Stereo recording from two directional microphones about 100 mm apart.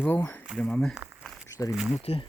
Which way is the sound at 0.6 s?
10° left (ahead or behind).